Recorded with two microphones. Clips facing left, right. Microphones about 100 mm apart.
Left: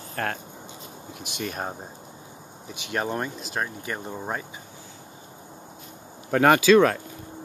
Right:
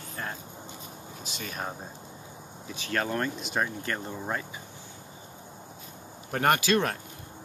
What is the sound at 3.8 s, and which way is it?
Speech, 15° left (ahead or behind).